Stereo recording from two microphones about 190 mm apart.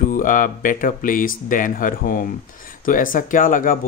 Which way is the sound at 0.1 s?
45° left (ahead or behind).